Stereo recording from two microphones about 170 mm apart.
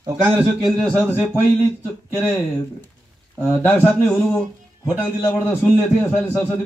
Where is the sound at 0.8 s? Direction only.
5° left (ahead or behind).